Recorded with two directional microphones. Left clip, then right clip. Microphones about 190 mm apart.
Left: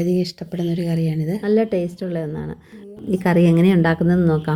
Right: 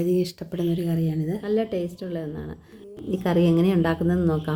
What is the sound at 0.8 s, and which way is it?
A woman's voice, 15° left (ahead or behind).